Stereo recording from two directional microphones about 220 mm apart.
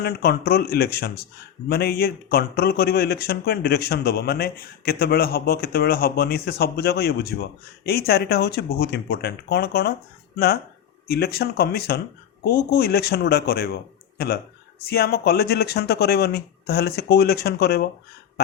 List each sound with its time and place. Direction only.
0.0 s a man's voice: 45° left (ahead or behind)
14.8 s a man's voice: 45° left (ahead or behind)